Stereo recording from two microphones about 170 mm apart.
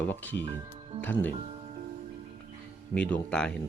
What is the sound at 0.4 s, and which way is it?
Speech, 30° right (ahead or behind).